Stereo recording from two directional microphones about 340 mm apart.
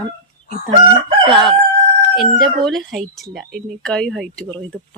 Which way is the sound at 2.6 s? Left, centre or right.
Centre.